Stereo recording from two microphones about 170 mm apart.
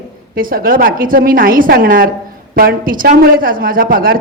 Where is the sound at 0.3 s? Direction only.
55° right (ahead or behind).